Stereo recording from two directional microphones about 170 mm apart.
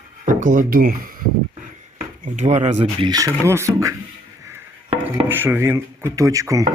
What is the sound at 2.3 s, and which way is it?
Speech, 45° right (ahead or behind).